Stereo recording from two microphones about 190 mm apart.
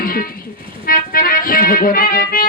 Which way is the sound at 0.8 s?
50° left (ahead or behind).